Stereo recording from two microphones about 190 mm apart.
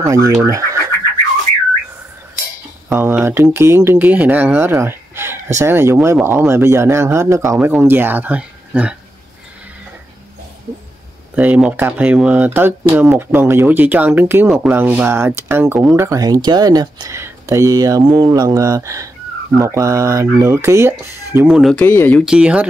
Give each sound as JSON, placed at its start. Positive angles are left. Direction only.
{"t": 0.0, "sound": "speech", "side_deg": -15}
{"t": 2.9, "sound": "speech", "side_deg": -10}
{"t": 11.3, "sound": "speech", "side_deg": -5}
{"t": 22.2, "sound": "speech", "side_deg": -5}